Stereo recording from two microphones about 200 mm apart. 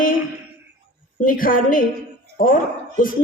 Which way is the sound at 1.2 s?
45° left (ahead or behind).